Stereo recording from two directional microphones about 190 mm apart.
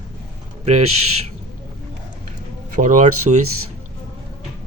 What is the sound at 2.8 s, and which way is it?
Speech, 40° right (ahead or behind).